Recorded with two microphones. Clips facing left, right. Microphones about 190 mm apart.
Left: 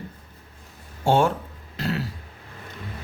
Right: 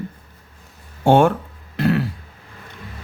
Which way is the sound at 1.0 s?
60° right (ahead or behind).